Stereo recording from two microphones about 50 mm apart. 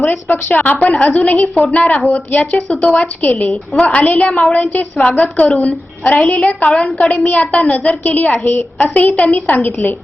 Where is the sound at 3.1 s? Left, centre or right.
Left.